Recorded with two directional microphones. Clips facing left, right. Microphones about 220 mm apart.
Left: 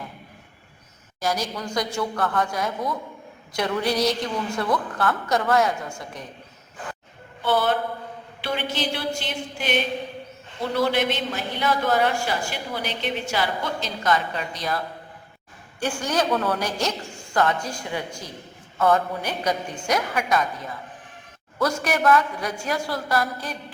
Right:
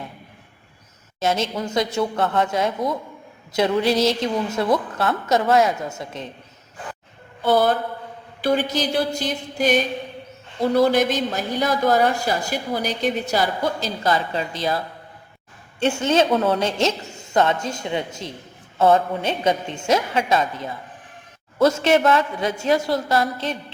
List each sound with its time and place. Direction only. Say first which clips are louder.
1.2 s a woman's voice: right 4 dB; 25° right (ahead or behind)
7.4 s a woman's voice: right 4 dB; 40° right (ahead or behind)
15.8 s a woman's voice: right 6 dB; 25° right (ahead or behind)